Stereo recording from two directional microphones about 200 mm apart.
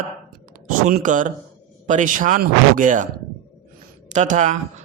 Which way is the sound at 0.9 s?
40° right (ahead or behind).